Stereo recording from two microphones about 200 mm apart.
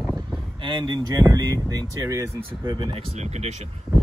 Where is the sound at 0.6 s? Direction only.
20° right (ahead or behind).